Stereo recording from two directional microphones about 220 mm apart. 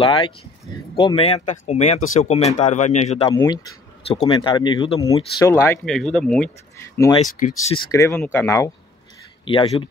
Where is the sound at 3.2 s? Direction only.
20° left (ahead or behind).